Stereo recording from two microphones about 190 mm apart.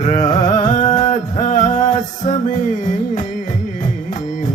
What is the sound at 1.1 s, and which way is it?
Music, 40° left (ahead or behind).